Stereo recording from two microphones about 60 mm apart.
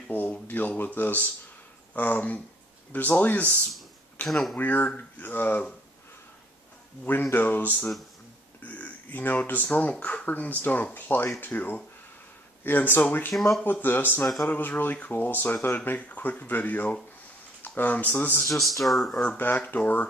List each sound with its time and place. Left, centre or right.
0.5 s speech: left
4.3 s speech: centre
4.6 s speech: left
7.3 s speech: left
13.3 s speech: centre
13.7 s speech: left
18.5 s speech: centre
19.2 s speech: left